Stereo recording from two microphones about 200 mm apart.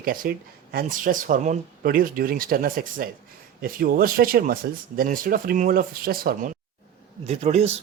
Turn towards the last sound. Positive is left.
turn(degrees=-30)  # may be behind; listen again after turning